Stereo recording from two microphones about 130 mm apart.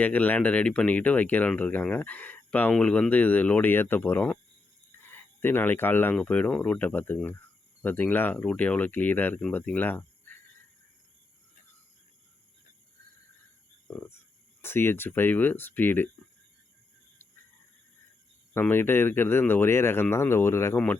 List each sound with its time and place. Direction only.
0.0 s speech: 10° left (ahead or behind)
13.8 s speech: 15° left (ahead or behind)
18.5 s speech: 15° left (ahead or behind)